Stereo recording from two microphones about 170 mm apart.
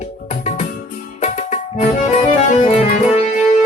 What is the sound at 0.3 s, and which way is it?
Music, 40° left (ahead or behind).